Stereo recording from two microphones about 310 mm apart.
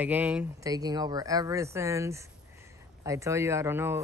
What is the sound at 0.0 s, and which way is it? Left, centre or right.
Speech, centre.